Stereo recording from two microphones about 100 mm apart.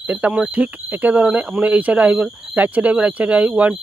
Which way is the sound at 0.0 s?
15° right (ahead or behind).